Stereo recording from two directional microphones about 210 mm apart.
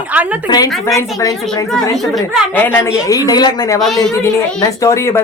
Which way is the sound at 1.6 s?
Centre (ahead or behind).